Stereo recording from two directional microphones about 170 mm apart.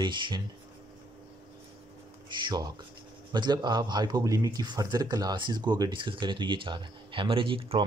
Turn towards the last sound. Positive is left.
turn(degrees=-30)  # may be behind; listen again after turning